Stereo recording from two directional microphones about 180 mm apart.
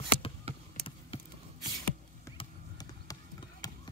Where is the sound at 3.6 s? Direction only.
20° left (ahead or behind).